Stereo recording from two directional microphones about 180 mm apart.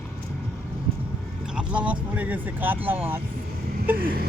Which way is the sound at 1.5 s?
5° right (ahead or behind).